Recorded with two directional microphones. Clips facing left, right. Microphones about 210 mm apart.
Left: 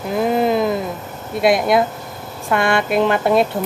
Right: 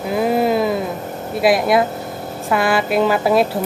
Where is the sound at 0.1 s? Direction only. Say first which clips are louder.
Even; 5° right (ahead or behind).